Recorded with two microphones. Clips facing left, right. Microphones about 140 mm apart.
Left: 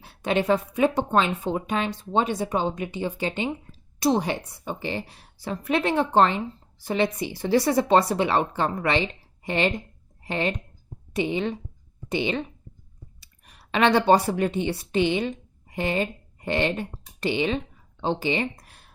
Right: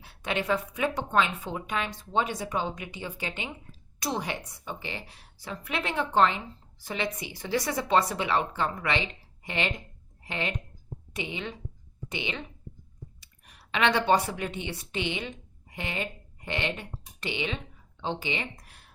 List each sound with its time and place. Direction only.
0.0 s a woman's voice: 30° left (ahead or behind)